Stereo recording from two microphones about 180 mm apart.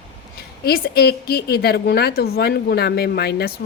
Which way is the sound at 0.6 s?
60° left (ahead or behind).